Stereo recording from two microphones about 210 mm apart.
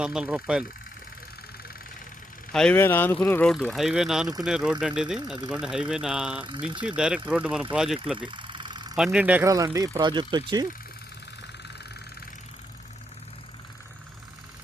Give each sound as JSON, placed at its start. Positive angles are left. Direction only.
{"t": 0.0, "sound": "speech", "side_deg": -5}
{"t": 2.5, "sound": "speech", "side_deg": 5}
{"t": 8.3, "sound": "engine", "side_deg": -20}
{"t": 9.0, "sound": "speech", "side_deg": -5}